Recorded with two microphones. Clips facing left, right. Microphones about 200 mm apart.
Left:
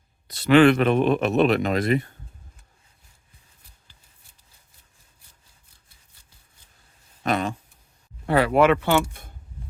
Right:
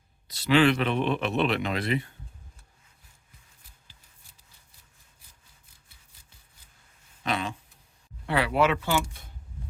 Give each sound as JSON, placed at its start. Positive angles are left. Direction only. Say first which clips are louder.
{"t": 0.3, "sound": "a man's voice", "louder": "left 6 dB", "side_deg": 55}
{"t": 7.2, "sound": "a sound", "louder": "left 6 dB", "side_deg": 45}
{"t": 8.3, "sound": "speech", "louder": "left 6 dB", "side_deg": 45}